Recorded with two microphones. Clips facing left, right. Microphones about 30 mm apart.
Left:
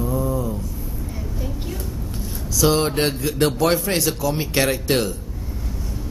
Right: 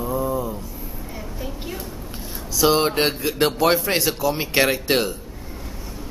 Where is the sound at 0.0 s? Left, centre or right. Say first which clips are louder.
Even; centre.